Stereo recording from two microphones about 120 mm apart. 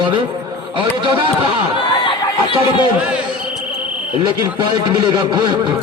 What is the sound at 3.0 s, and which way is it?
Speech, 10° right (ahead or behind).